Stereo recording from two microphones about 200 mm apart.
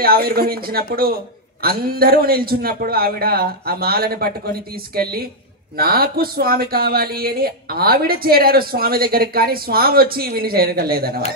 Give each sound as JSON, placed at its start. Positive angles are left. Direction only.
{"t": 0.0, "sound": "speech", "side_deg": -50}